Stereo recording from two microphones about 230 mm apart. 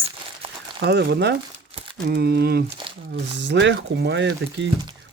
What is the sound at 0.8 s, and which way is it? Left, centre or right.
Speech, right.